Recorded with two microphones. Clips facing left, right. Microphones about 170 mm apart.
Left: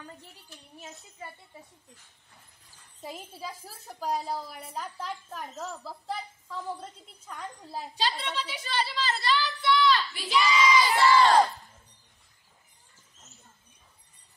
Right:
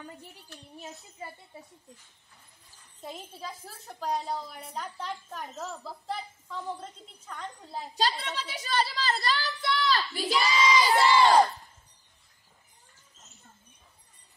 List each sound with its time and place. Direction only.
3.0 s a woman's voice: 5° left (ahead or behind)
8.0 s a woman's voice: 45° right (ahead or behind); by 11.1 s 25° right (ahead or behind)
11.1 s crowd: 10° right (ahead or behind)